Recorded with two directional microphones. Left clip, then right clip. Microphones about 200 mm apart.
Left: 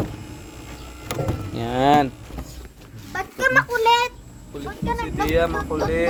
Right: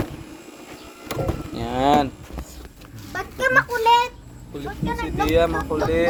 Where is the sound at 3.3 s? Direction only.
45° left (ahead or behind).